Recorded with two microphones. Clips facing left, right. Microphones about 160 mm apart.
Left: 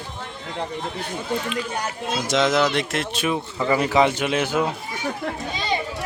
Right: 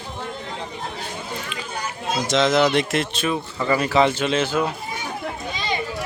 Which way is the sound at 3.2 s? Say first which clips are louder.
Even; 15° left (ahead or behind).